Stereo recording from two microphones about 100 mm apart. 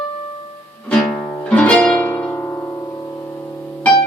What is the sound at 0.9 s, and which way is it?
Music, 10° left (ahead or behind).